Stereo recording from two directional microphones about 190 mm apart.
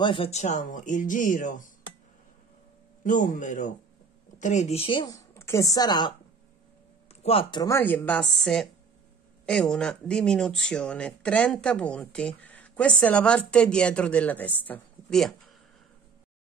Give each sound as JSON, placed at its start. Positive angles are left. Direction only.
{"t": 0.0, "sound": "speech", "side_deg": 30}
{"t": 3.0, "sound": "a man's voice", "side_deg": 45}
{"t": 7.6, "sound": "speech", "side_deg": 10}